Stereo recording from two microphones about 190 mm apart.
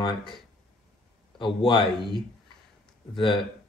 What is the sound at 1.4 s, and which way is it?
A man's voice, 25° left (ahead or behind).